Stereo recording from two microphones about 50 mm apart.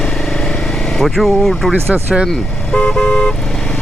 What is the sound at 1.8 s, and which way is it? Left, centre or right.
Speech, right.